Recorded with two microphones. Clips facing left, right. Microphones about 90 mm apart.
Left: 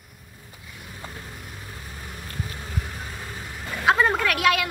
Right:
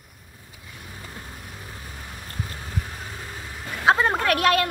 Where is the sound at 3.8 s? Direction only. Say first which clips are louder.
Right 1 dB; 35° right (ahead or behind).